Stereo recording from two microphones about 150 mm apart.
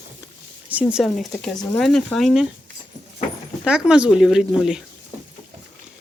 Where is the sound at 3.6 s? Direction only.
5° right (ahead or behind).